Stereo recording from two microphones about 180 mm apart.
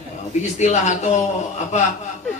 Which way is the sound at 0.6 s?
40° left (ahead or behind).